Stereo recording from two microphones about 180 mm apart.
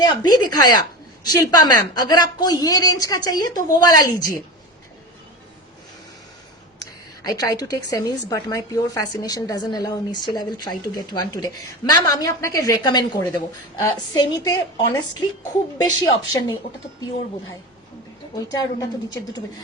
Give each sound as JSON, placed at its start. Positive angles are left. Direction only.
{"t": 0.0, "sound": "a woman's voice", "side_deg": 20}
{"t": 7.3, "sound": "a woman's voice", "side_deg": 20}
{"t": 18.4, "sound": "a woman's voice", "side_deg": 20}